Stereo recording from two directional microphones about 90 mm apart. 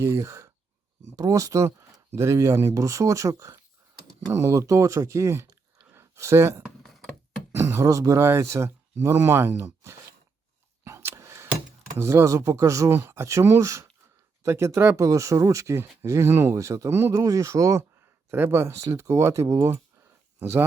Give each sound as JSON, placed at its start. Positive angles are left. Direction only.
{"t": 0.0, "sound": "speech", "side_deg": -30}
{"t": 6.8, "sound": "knock", "side_deg": 5}
{"t": 7.5, "sound": "speech", "side_deg": -35}
{"t": 10.8, "sound": "a sound", "side_deg": -30}
{"t": 11.9, "sound": "speech", "side_deg": -30}
{"t": 14.9, "sound": "speech", "side_deg": -35}
{"t": 19.7, "sound": "a sound", "side_deg": -25}